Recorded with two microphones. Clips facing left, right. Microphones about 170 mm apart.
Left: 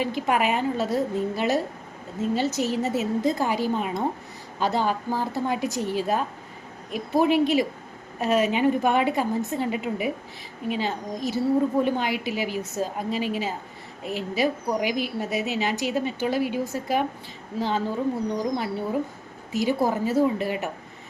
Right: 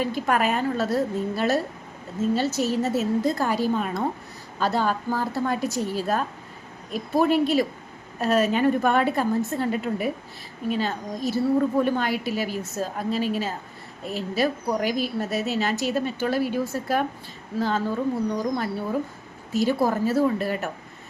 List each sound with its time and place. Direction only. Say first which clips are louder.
0.0 s a woman's voice: even; 15° left (ahead or behind)